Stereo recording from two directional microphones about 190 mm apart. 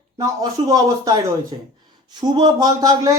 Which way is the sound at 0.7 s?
20° right (ahead or behind).